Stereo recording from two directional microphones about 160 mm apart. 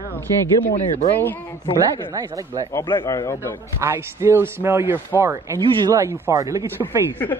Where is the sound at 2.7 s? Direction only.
15° left (ahead or behind).